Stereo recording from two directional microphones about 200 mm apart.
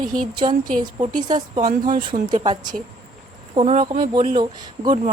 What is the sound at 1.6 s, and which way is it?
Speech, 40° right (ahead or behind).